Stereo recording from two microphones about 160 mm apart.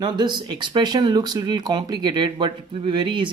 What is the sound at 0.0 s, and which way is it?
Speech, 25° right (ahead or behind).